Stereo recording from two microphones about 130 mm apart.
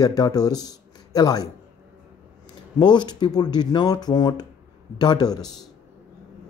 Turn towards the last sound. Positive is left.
turn(degrees=30)  # may be behind; listen again after turning